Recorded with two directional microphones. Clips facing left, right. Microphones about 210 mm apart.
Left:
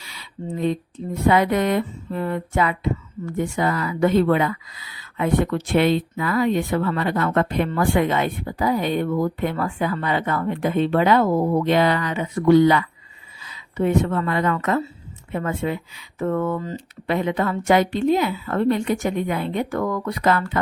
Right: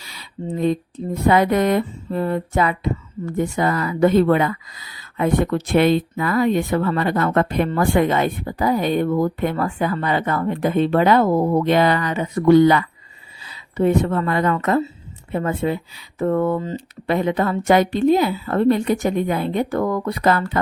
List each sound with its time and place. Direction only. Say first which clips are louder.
0.0 s a sound: right 1 dB; 40° right (ahead or behind)
0.6 s speech: right 3 dB; 40° right (ahead or behind)
13.4 s speech: right 3 dB; 35° right (ahead or behind)